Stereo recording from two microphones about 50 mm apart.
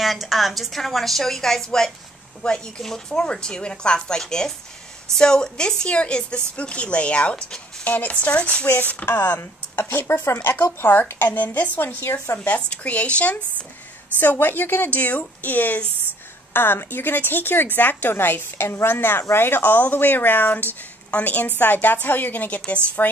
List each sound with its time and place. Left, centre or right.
0.0 s a woman's voice: centre
7.8 s a woman's voice: left
8.7 s speech: left
12.4 s a woman's voice: left
14.2 s speech: left
14.9 s speech: left
16.5 s speech: left